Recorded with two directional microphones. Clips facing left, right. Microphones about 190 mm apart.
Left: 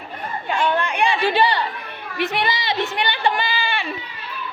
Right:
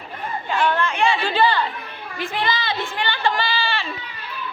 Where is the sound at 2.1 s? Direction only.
70° left (ahead or behind).